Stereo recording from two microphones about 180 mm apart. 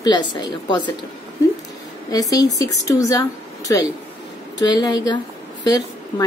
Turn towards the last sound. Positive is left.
turn(degrees=20)  # may be behind; listen again after turning